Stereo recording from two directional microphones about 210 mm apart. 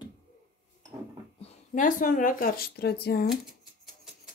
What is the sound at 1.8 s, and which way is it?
Speech, 40° left (ahead or behind).